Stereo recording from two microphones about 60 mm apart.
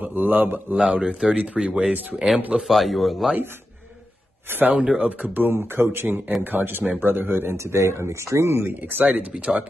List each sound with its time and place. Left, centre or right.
0.0 s a man's voice: right
0.7 s a man's voice: centre
2.6 s a man's voice: centre
4.5 s speech: right
4.7 s speech: centre; by 7.5 s right
7.5 s speech: right
8.6 s speech: right
9.3 s a man's voice: centre